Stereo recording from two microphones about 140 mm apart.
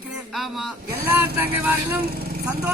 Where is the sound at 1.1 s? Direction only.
15° right (ahead or behind).